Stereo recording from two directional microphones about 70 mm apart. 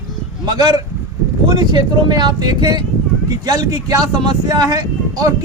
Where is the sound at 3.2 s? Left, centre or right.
Right.